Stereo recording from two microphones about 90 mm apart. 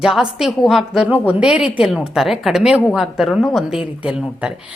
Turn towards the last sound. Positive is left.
turn(degrees=-10)  # may be behind; listen again after turning